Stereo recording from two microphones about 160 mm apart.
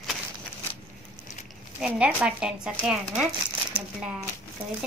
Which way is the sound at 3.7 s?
5° right (ahead or behind).